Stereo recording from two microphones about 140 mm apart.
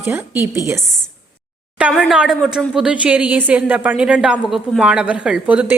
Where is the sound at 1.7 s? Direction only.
5° right (ahead or behind).